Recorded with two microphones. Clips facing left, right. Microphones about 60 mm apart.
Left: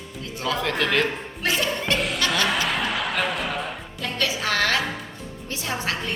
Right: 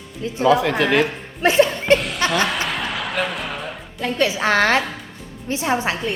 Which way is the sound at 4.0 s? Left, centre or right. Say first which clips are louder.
Right 7 dB; right.